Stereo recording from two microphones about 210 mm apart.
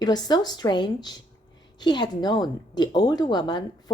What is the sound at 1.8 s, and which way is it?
A woman's voice, 20° left (ahead or behind).